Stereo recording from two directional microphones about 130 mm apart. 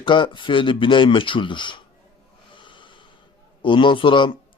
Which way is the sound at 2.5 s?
40° left (ahead or behind).